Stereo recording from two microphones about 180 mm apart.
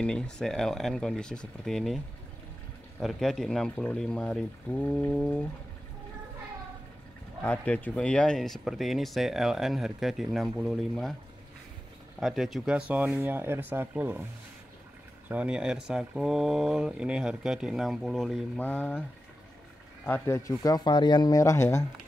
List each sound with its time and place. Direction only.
0.0 s speech: 5° left (ahead or behind)
3.0 s speech: centre (ahead or behind)
7.4 s speech: 5° left (ahead or behind)
12.2 s speech: centre (ahead or behind)
15.2 s speech: 5° right (ahead or behind)
20.1 s speech: 15° left (ahead or behind)